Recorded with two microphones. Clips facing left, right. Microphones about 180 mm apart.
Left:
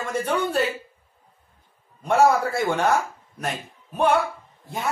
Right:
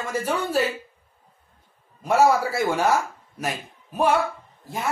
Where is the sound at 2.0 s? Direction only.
5° right (ahead or behind).